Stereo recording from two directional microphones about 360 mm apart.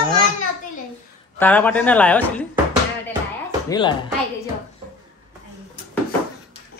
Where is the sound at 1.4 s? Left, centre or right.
Centre.